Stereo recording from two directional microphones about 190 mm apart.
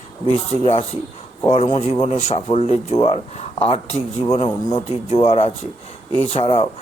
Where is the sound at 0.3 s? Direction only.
30° left (ahead or behind).